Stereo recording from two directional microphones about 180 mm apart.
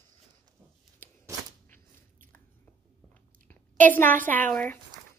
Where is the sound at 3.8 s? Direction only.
10° left (ahead or behind).